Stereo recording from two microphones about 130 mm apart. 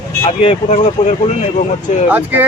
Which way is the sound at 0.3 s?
60° left (ahead or behind).